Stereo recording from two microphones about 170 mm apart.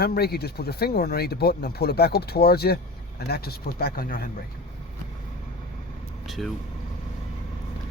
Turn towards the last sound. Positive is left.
turn(degrees=0)  # may be behind; listen again after turning